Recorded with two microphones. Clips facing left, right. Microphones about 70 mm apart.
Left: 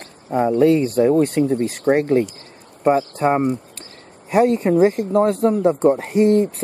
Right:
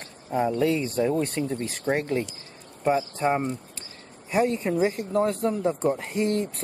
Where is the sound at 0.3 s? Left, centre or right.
Centre.